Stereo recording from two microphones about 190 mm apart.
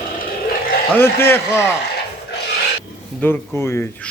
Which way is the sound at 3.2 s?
10° left (ahead or behind).